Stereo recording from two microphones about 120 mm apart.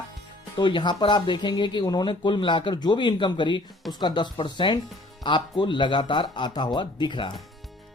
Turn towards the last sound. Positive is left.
turn(degrees=40)  # may be behind; listen again after turning